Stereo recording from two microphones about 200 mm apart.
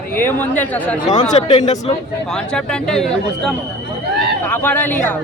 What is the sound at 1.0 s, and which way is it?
Speech, 25° left (ahead or behind).